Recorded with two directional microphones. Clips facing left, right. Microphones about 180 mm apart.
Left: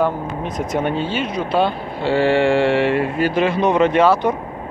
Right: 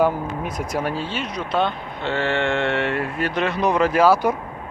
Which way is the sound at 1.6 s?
10° left (ahead or behind).